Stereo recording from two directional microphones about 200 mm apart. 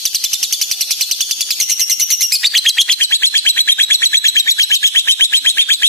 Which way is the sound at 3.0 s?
10° left (ahead or behind).